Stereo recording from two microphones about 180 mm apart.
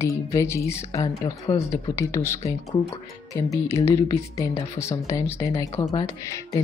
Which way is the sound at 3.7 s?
15° left (ahead or behind).